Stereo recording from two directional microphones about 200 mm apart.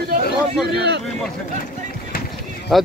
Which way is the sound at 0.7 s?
55° right (ahead or behind).